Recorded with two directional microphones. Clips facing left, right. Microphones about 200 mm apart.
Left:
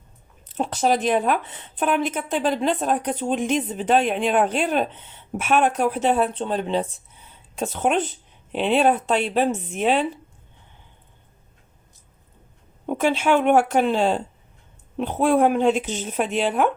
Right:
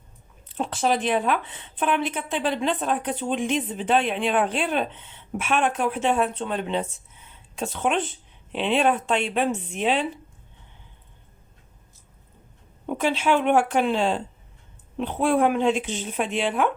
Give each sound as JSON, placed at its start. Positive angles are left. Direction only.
{"t": 0.4, "sound": "speech", "side_deg": 40}
{"t": 13.0, "sound": "speech", "side_deg": 50}